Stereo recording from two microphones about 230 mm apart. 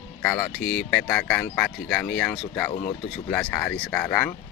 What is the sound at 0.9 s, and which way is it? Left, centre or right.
Speech, centre.